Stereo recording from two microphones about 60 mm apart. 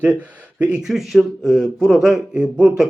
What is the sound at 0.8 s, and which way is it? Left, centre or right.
Speech, centre.